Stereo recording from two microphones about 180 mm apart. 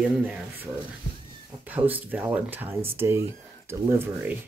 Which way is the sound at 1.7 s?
10° right (ahead or behind).